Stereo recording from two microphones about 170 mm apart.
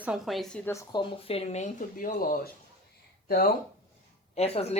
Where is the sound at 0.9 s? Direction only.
30° left (ahead or behind); by 2.4 s 60° left (ahead or behind).